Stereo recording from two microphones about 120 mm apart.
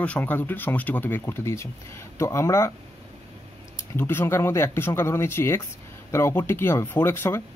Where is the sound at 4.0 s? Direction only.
20° left (ahead or behind).